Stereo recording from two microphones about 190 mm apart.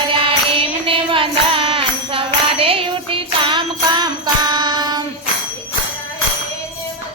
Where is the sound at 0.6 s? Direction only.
30° right (ahead or behind).